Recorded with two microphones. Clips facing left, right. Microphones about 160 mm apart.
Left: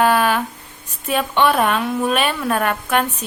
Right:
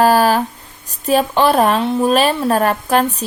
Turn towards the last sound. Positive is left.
turn(degrees=-35)  # may be behind; listen again after turning